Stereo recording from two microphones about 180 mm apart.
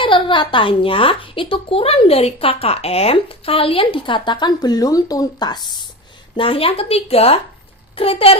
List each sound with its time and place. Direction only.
0.0 s speech: 25° left (ahead or behind)